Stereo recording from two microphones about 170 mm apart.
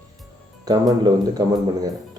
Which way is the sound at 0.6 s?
25° right (ahead or behind).